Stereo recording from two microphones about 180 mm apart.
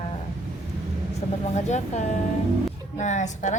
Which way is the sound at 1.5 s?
40° left (ahead or behind).